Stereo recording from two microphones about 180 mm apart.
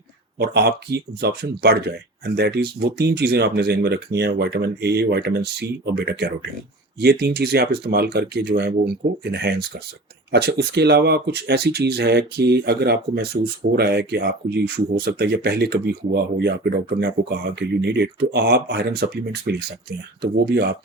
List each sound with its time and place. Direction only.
0.3 s speech: 65° right (ahead or behind)